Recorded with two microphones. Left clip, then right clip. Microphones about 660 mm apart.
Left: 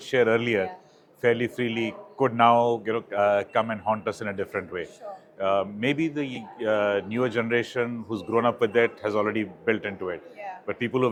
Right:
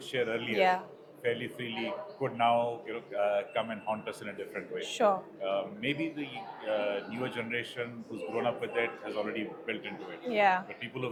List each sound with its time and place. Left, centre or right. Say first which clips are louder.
0.1 s a man's voice: left 10 dB; left
5.0 s speech: right 13 dB; right
5.4 s a man's voice: left 8 dB; left
10.3 s speech: right 12 dB; right
10.8 s a man's voice: left 13 dB; left